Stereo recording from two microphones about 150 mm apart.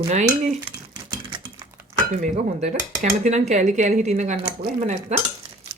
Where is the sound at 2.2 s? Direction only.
55° right (ahead or behind).